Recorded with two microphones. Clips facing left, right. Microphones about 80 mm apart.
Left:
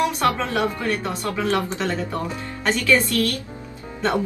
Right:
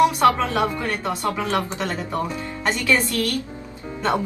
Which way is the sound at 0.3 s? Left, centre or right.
Right.